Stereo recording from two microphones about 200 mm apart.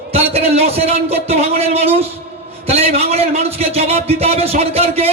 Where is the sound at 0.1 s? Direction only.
30° right (ahead or behind).